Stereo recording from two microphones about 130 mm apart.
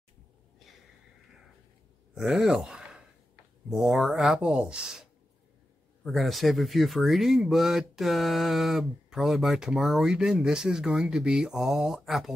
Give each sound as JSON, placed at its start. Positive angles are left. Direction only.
{"t": 2.1, "sound": "speech", "side_deg": -5}
{"t": 6.0, "sound": "speech", "side_deg": 0}